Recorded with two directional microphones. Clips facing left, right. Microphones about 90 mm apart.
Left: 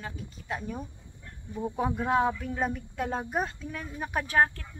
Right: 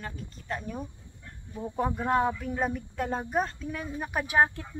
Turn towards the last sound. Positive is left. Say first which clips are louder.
# right 1 dB
turn(degrees=-20)  # may be behind; listen again after turning